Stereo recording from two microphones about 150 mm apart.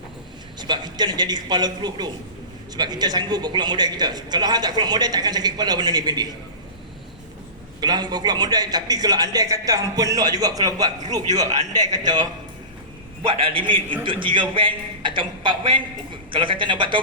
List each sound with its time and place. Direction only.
0.6 s speech: 30° right (ahead or behind)
7.8 s speech: 25° right (ahead or behind)
11.4 s a man's voice: 50° right (ahead or behind)
11.7 s a man's voice: 25° right (ahead or behind)